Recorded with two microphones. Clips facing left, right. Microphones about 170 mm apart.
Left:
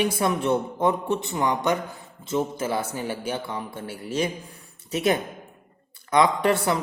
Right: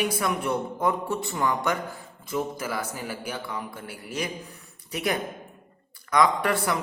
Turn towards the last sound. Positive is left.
turn(degrees=25)  # may be behind; listen again after turning